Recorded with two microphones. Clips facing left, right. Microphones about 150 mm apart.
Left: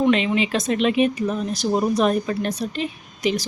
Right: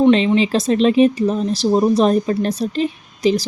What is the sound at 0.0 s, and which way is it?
Speech, 30° right (ahead or behind).